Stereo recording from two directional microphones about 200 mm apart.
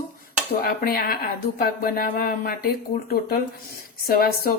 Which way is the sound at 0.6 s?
45° left (ahead or behind).